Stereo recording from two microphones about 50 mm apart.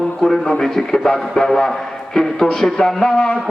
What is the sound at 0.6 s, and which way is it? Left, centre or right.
A man's voice, centre.